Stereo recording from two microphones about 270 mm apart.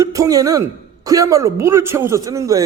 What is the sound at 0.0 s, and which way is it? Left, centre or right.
Speech, centre.